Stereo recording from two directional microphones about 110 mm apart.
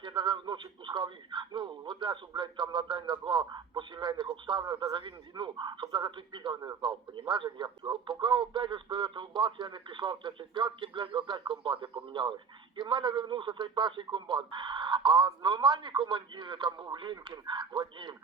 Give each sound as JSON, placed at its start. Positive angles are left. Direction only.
{"t": 0.0, "sound": "a man's voice", "side_deg": -40}
{"t": 6.6, "sound": "a man's voice", "side_deg": -35}